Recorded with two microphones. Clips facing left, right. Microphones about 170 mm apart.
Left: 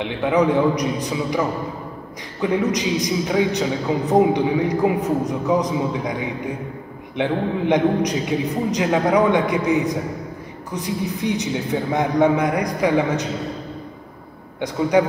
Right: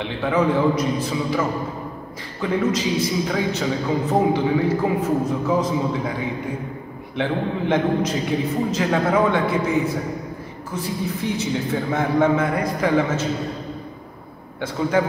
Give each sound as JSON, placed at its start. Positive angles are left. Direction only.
{"t": 0.0, "sound": "a man's voice", "side_deg": 15}
{"t": 14.6, "sound": "a man's voice", "side_deg": 15}